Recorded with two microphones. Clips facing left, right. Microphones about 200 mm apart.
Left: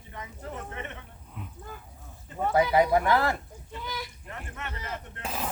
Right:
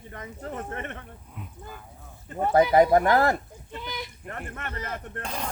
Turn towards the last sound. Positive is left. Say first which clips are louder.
# even
turn(degrees=5)  # may be behind; listen again after turning